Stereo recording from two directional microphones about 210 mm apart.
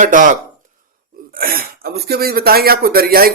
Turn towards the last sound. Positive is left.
turn(degrees=-45)  # may be behind; listen again after turning